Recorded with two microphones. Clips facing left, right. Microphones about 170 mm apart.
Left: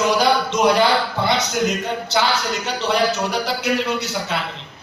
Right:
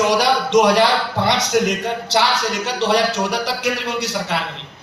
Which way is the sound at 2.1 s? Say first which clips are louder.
Right 2 dB; 90° right.